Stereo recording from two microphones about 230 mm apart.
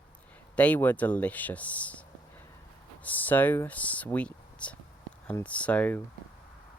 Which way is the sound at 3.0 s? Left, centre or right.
Centre.